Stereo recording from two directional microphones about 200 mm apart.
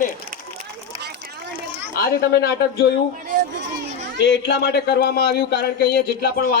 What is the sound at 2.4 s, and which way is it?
Speech, 55° left (ahead or behind).